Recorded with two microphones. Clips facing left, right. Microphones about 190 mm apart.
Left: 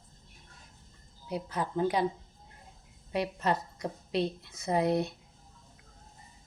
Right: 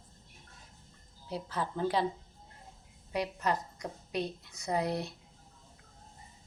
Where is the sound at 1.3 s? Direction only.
15° left (ahead or behind).